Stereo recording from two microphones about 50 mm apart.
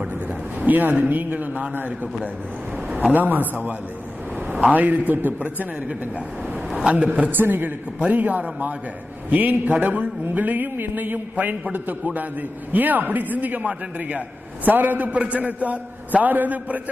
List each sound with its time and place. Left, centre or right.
0.7 s a man's voice: right
3.0 s a man's voice: right
4.7 s a man's voice: right
7.2 s a man's voice: right